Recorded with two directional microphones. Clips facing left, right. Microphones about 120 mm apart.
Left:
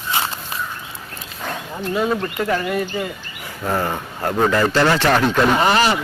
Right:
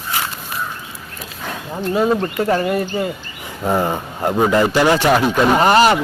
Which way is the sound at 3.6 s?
15° right (ahead or behind).